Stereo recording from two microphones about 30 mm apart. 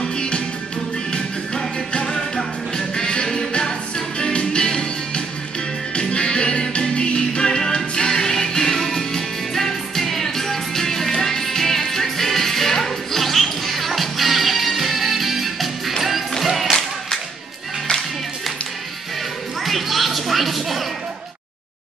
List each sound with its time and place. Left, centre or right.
0.0 s music: left
4.2 s music: left; by 16.3 s centre
19.6 s music: centre